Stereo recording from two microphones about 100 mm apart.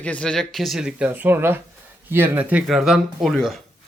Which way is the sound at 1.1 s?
20° right (ahead or behind).